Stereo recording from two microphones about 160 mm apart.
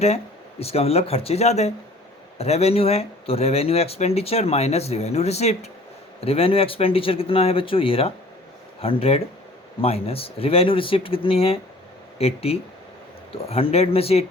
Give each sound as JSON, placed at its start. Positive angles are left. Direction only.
{"t": 0.6, "sound": "speech", "side_deg": 40}